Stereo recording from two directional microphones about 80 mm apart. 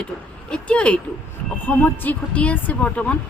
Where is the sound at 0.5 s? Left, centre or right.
Centre.